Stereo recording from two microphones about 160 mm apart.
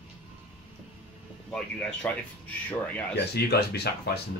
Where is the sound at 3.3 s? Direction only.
90° left.